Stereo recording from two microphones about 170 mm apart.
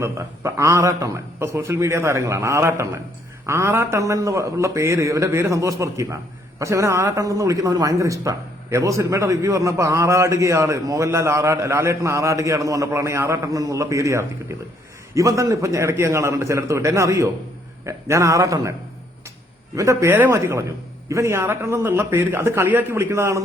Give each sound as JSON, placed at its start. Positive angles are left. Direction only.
{"t": 0.0, "sound": "a man's voice", "side_deg": -15}
{"t": 19.7, "sound": "a man's voice", "side_deg": -20}